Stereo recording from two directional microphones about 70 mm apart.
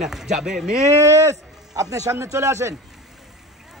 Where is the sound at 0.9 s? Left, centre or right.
Right.